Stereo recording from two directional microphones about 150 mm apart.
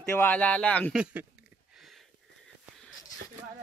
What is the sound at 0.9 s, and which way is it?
Speech, 5° right (ahead or behind).